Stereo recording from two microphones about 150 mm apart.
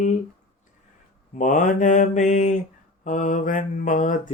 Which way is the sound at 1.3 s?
55° left (ahead or behind).